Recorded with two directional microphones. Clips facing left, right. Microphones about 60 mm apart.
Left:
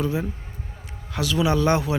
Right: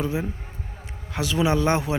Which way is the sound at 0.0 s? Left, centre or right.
Right.